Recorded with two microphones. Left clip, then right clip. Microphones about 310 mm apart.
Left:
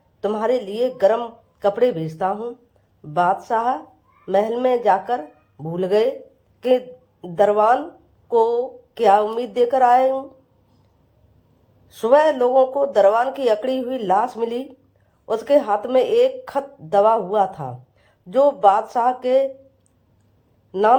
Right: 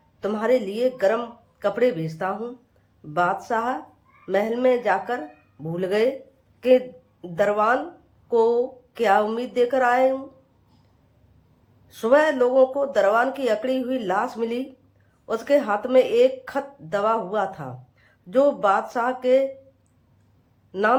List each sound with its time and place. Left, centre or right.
0.2 s a woman's voice: centre
11.9 s speech: centre
20.7 s speech: centre